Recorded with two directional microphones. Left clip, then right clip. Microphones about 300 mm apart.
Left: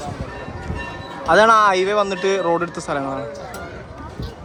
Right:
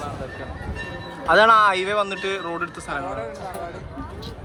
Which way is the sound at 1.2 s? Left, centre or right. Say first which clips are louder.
Left 2 dB; centre.